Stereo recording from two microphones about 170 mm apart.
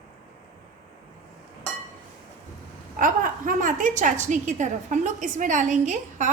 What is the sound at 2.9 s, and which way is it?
A woman's voice, 55° right (ahead or behind).